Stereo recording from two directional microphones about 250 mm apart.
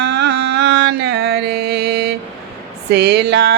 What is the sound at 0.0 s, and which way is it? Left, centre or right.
Mantra, right.